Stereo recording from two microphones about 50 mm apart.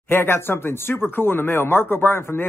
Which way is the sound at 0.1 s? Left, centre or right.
Left.